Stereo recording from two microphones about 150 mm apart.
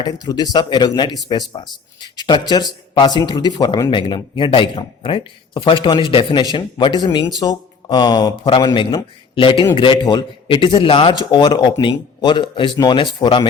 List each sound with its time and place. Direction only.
0.0 s speech: 25° left (ahead or behind)